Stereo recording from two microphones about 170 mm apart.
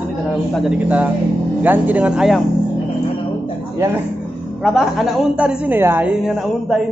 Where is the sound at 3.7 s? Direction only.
15° right (ahead or behind).